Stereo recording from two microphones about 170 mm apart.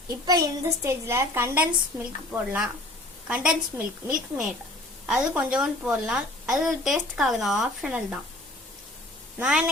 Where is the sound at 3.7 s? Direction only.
15° right (ahead or behind).